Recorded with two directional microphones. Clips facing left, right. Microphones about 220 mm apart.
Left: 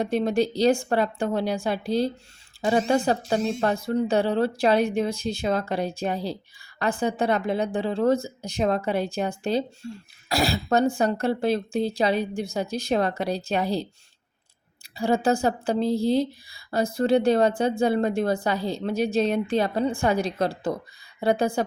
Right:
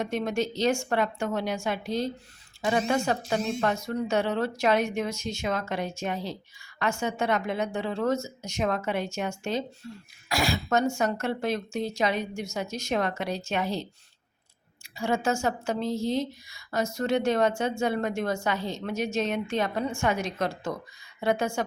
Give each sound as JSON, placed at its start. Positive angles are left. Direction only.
{"t": 0.0, "sound": "speech", "side_deg": 35}
{"t": 14.9, "sound": "speech", "side_deg": 35}